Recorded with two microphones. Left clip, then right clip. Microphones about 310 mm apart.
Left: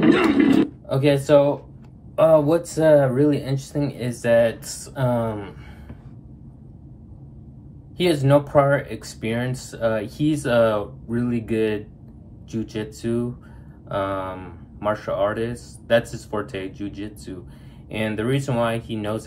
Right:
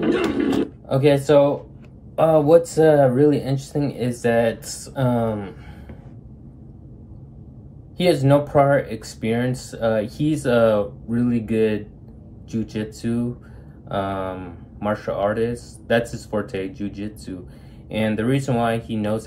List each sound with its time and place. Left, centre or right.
0.0 s a sound: left
0.8 s speech: centre
8.0 s speech: centre